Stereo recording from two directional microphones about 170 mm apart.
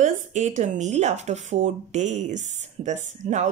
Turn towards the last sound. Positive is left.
turn(degrees=-45)  # may be behind; listen again after turning